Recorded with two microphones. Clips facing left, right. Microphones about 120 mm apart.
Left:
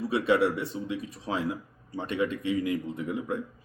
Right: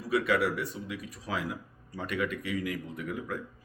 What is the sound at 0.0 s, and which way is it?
Speech, 25° left (ahead or behind).